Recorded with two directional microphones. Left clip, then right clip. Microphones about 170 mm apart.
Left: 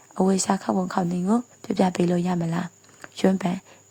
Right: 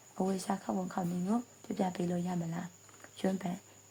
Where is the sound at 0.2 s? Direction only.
50° left (ahead or behind).